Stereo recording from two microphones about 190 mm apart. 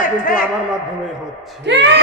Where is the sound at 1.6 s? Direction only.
65° right (ahead or behind).